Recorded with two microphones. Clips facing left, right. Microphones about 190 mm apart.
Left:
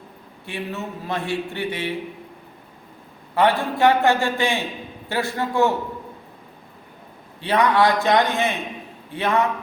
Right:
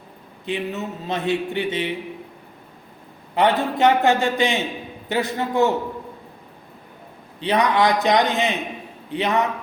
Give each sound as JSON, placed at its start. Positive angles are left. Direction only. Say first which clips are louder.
{"t": 0.4, "sound": "a man's voice", "louder": "right 4 dB", "side_deg": -20}
{"t": 3.3, "sound": "a man's voice", "louder": "even", "side_deg": -20}
{"t": 7.3, "sound": "a man's voice", "louder": "left 1 dB", "side_deg": -15}